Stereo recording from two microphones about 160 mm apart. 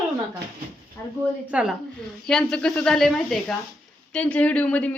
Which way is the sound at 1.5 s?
10° right (ahead or behind).